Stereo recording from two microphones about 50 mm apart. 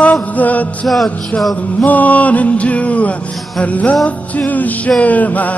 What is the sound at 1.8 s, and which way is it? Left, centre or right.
Music, left.